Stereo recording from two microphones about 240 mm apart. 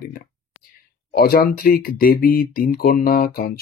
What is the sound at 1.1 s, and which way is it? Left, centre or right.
Speech, left.